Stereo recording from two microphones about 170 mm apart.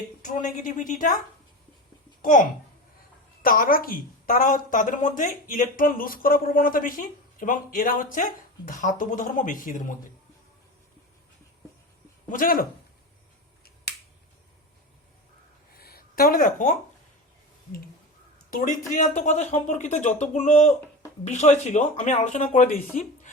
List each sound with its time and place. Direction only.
0.2 s a woman's voice: 45° left (ahead or behind)
2.2 s a woman's voice: 55° left (ahead or behind)
12.3 s speech: 55° left (ahead or behind)
15.7 s a sound: 60° left (ahead or behind)
18.5 s a woman's voice: 50° left (ahead or behind)